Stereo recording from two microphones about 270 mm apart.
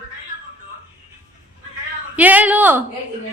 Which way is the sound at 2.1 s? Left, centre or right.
Centre.